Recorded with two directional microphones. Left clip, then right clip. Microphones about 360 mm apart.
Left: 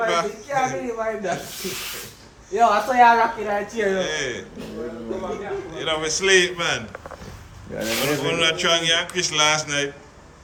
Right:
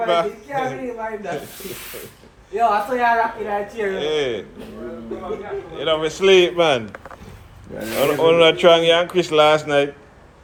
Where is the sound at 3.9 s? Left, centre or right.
Centre.